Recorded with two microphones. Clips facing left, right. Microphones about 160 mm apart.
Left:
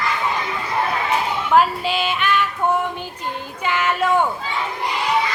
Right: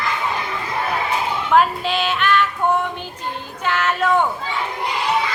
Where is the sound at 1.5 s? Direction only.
5° left (ahead or behind).